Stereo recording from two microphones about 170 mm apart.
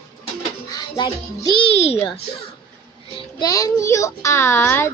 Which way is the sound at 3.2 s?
20° left (ahead or behind).